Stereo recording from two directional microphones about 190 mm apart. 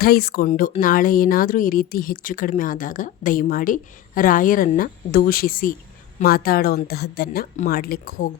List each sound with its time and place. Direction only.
0.0 s speech: 55° left (ahead or behind)
7.5 s speech: 45° left (ahead or behind)